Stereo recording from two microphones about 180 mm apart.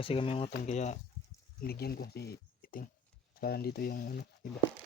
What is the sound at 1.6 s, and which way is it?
Speech, 60° left (ahead or behind).